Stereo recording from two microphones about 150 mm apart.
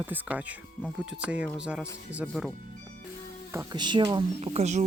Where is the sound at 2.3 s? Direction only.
5° left (ahead or behind).